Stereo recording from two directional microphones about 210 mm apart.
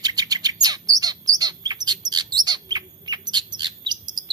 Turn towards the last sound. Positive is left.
turn(degrees=-20)  # may be behind; listen again after turning